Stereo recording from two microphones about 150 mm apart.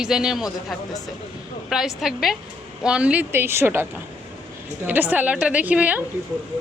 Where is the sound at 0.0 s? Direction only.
5° right (ahead or behind).